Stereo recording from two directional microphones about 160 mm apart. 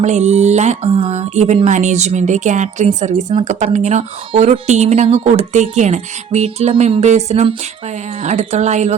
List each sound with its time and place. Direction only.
0.0 s speech: 45° right (ahead or behind)